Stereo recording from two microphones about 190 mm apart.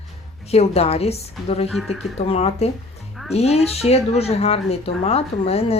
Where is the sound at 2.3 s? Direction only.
30° left (ahead or behind).